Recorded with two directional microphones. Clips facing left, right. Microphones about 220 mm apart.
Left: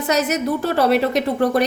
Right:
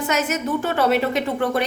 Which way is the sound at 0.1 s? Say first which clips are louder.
Left 5 dB; 35° left (ahead or behind).